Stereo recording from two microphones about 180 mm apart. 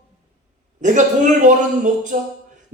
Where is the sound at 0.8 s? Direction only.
45° right (ahead or behind).